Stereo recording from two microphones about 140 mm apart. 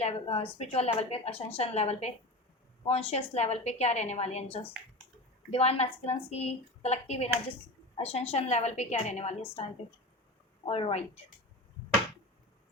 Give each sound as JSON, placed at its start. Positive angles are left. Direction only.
{"t": 0.0, "sound": "a woman's voice", "side_deg": 45}
{"t": 10.7, "sound": "a woman's voice", "side_deg": 40}